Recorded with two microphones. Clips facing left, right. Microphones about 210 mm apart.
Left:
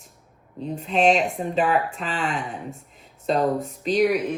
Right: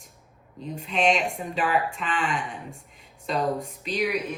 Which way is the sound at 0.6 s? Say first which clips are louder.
Left 5 dB; 35° left (ahead or behind).